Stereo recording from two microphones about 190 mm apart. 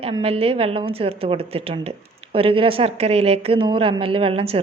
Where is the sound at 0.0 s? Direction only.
30° right (ahead or behind).